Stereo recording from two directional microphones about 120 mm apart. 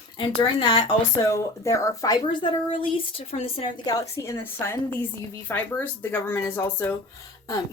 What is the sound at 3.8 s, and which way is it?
Speech, 30° left (ahead or behind).